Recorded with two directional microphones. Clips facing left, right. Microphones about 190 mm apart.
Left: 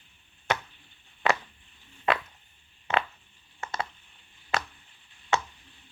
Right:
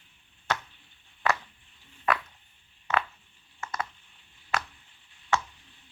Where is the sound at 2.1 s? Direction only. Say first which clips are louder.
Left 1 dB; 25° left (ahead or behind).